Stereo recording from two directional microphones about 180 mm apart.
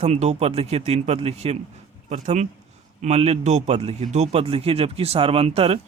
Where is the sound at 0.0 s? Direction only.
40° right (ahead or behind).